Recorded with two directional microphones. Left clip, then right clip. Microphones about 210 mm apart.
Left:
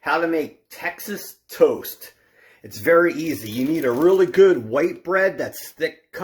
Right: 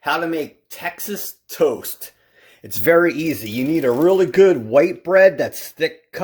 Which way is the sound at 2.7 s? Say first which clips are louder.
Right 2 dB; 50° right (ahead or behind).